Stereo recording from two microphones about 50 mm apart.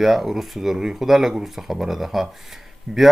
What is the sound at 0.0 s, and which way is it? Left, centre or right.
Speech, centre.